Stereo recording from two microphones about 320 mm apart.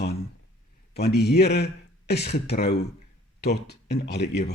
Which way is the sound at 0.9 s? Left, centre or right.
Left.